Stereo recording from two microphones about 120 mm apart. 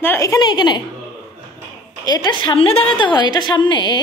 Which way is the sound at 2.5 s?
50° left (ahead or behind).